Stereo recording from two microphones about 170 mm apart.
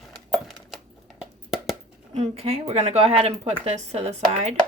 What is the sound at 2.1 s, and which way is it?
Speech, 40° right (ahead or behind).